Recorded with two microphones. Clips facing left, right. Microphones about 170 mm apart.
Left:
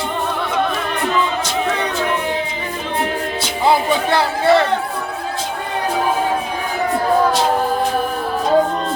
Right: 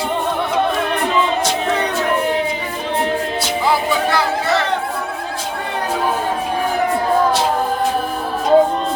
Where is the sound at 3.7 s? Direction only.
30° left (ahead or behind).